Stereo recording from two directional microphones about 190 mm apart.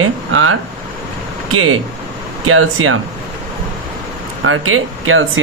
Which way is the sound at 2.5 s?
90° right.